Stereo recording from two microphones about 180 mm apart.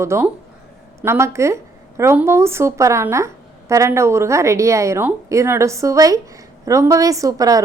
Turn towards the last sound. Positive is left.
turn(degrees=-20)  # may be behind; listen again after turning